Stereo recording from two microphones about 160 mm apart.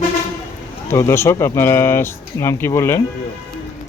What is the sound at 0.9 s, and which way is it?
Speech, 15° left (ahead or behind).